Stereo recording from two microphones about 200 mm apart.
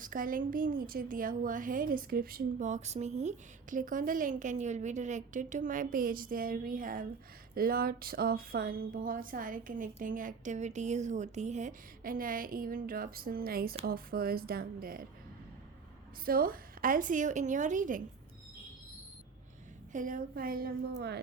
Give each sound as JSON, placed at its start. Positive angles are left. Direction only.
{"t": 0.0, "sound": "a woman's voice", "side_deg": -40}
{"t": 16.2, "sound": "a woman's voice", "side_deg": -45}
{"t": 19.9, "sound": "a woman's voice", "side_deg": -40}